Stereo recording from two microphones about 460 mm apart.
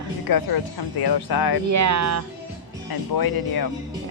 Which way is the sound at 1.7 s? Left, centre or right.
Right.